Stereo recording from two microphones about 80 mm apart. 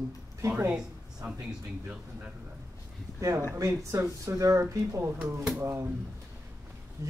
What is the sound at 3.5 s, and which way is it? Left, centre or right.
Speech, right.